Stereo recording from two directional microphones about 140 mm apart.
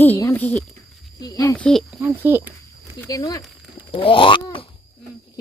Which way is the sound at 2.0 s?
15° right (ahead or behind).